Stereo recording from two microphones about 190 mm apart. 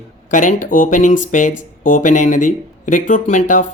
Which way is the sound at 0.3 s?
45° left (ahead or behind).